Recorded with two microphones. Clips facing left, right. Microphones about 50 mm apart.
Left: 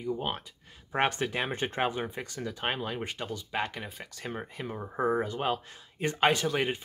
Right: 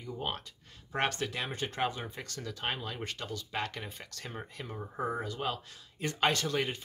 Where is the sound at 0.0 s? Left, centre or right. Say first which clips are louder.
Left 5 dB; centre.